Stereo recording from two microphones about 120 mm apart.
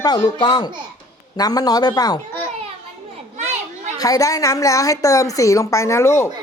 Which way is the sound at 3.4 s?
75° right (ahead or behind).